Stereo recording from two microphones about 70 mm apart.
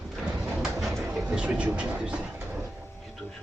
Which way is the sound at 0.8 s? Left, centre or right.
Centre.